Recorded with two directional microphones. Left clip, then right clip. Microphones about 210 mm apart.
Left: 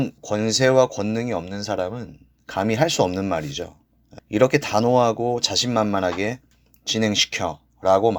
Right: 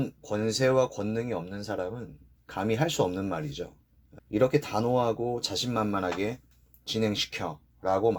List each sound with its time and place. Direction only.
0.0 s speech: 20° left (ahead or behind)